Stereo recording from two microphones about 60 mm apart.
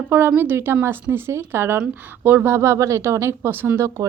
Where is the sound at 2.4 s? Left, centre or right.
Right.